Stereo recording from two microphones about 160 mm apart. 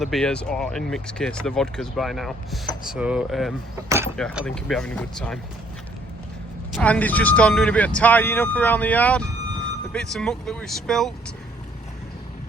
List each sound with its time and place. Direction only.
0.0 s speech: 5° left (ahead or behind)
3.8 s speech: 15° right (ahead or behind)
4.4 s speech: 5° left (ahead or behind)
6.7 s speech: 10° left (ahead or behind)